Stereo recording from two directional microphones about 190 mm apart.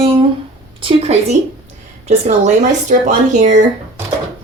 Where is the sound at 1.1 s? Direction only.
35° right (ahead or behind).